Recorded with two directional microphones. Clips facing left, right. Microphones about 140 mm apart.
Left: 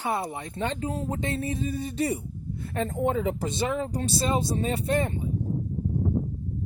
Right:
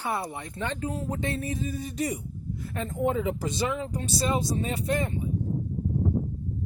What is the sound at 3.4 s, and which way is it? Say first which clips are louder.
Speech: left 1 dB; 25° left (ahead or behind).